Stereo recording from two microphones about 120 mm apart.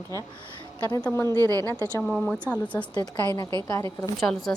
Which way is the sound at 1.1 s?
20° left (ahead or behind).